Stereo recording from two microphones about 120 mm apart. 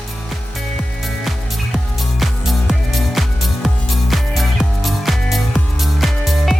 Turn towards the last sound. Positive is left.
turn(degrees=0)  # may be behind; listen again after turning